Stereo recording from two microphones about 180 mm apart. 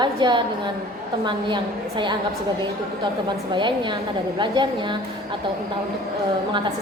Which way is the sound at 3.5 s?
25° right (ahead or behind).